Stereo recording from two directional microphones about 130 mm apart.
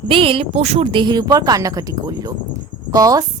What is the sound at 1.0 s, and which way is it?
A woman's voice, 30° right (ahead or behind).